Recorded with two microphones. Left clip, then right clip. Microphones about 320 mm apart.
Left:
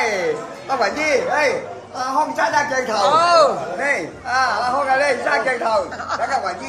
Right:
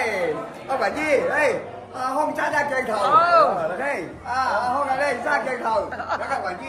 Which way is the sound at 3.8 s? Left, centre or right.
Left.